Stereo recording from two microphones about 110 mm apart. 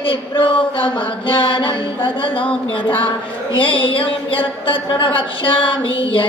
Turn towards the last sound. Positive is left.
turn(degrees=50)  # may be behind; listen again after turning